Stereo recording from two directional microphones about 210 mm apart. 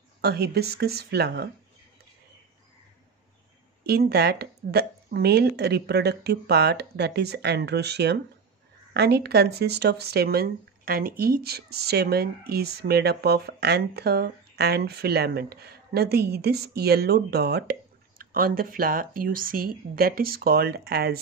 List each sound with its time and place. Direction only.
0.2 s speech: 50° right (ahead or behind)
3.8 s speech: 50° right (ahead or behind)